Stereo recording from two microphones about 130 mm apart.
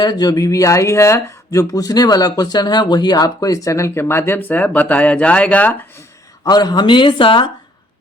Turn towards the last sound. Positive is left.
turn(degrees=40)  # may be behind; listen again after turning